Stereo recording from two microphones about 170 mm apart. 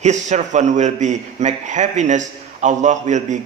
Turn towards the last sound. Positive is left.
turn(degrees=-45)  # may be behind; listen again after turning